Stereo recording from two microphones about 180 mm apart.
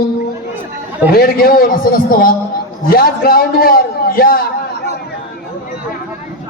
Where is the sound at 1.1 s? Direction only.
55° left (ahead or behind).